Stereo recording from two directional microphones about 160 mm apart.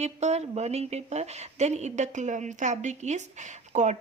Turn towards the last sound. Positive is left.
turn(degrees=-50)  # may be behind; listen again after turning